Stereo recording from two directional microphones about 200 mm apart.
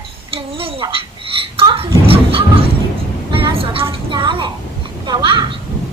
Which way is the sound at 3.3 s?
25° right (ahead or behind).